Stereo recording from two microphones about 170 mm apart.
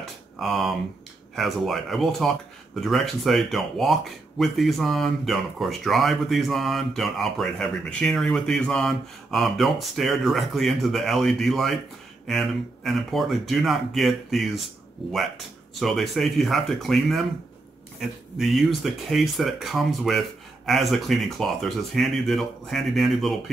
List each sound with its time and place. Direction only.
0.4 s speech: centre (ahead or behind)
18.4 s speech: centre (ahead or behind)